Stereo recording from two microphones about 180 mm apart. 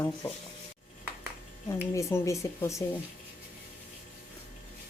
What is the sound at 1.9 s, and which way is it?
Speech, 15° left (ahead or behind).